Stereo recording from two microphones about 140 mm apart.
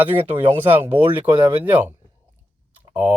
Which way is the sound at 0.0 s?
15° right (ahead or behind).